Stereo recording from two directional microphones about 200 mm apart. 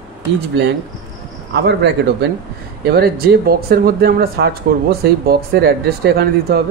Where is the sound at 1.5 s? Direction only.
60° right (ahead or behind).